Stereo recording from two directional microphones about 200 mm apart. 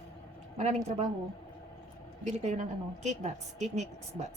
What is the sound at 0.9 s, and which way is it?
Speech, 35° right (ahead or behind).